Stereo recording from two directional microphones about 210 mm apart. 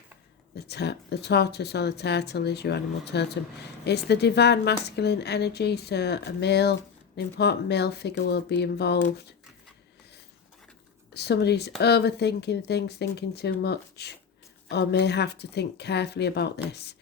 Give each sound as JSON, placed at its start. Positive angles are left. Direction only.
{"t": 0.5, "sound": "a woman's voice", "side_deg": 50}
{"t": 11.1, "sound": "a woman's voice", "side_deg": 50}